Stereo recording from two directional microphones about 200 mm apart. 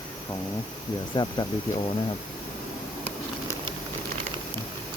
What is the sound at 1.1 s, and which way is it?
Speech, 20° left (ahead or behind).